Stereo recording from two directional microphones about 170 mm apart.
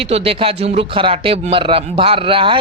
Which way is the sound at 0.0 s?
35° right (ahead or behind).